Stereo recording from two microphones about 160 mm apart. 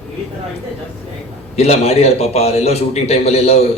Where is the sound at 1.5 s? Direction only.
40° left (ahead or behind).